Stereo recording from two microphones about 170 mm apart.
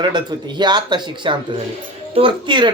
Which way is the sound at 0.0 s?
25° right (ahead or behind).